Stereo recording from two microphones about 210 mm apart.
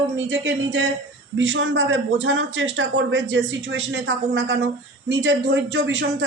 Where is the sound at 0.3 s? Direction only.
55° right (ahead or behind).